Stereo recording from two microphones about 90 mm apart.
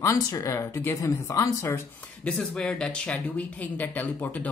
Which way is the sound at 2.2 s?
10° left (ahead or behind).